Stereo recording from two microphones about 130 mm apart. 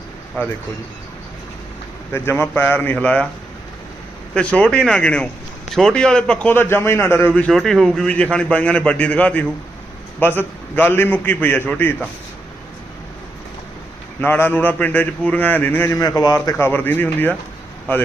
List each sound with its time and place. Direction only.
0.4 s a man's voice: 15° left (ahead or behind)
2.4 s a man's voice: 15° left (ahead or behind)
4.4 s a man's voice: 10° left (ahead or behind)
14.2 s a man's voice: 15° left (ahead or behind)
16.6 s a man's voice: 15° left (ahead or behind)